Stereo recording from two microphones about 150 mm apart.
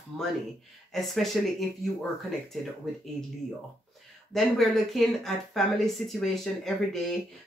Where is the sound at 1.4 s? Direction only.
Centre (ahead or behind).